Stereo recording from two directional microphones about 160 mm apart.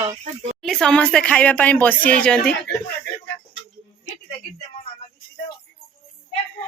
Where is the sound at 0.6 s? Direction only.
5° left (ahead or behind).